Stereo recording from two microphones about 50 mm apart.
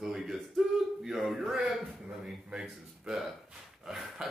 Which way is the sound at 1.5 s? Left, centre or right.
Centre.